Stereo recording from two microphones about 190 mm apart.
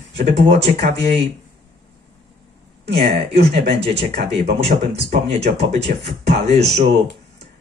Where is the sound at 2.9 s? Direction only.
35° right (ahead or behind).